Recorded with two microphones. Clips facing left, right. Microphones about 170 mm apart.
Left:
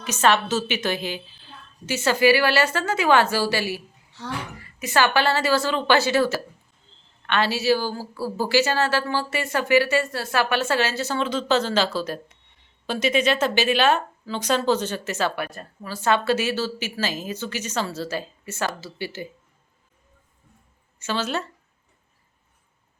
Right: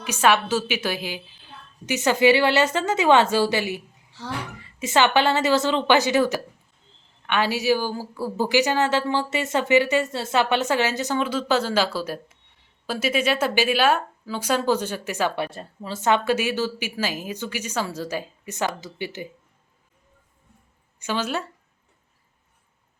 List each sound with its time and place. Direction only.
0.0 s a woman's voice: 10° right (ahead or behind)
15.4 s a woman's voice: 25° right (ahead or behind)
21.0 s a woman's voice: 15° right (ahead or behind)